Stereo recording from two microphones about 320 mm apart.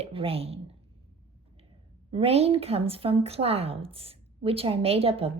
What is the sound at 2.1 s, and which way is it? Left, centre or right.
A woman's voice, centre.